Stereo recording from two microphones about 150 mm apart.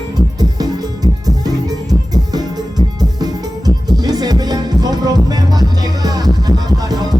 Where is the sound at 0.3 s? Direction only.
25° right (ahead or behind).